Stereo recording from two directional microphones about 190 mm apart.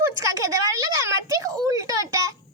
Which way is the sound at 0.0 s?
15° right (ahead or behind).